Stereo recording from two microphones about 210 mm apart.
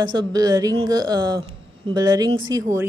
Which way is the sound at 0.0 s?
20° right (ahead or behind).